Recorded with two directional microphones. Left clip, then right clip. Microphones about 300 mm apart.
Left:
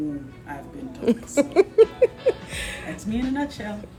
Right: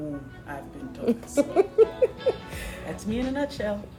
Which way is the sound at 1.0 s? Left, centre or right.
Left.